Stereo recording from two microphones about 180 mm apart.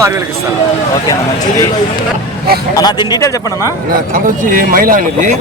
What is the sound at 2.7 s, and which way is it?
Speech, 20° left (ahead or behind).